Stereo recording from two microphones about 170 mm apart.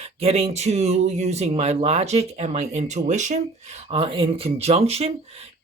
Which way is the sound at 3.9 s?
35° right (ahead or behind).